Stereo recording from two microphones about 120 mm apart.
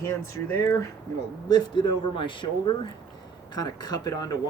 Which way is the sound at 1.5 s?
40° left (ahead or behind).